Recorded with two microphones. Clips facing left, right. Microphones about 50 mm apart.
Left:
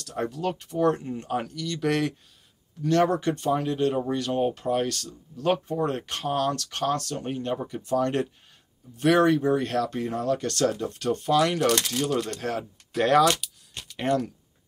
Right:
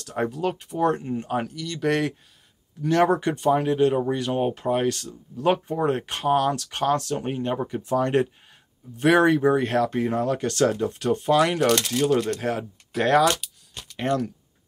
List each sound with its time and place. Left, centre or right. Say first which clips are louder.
0.0 s speech: right 3 dB; right
0.4 s speech: even; centre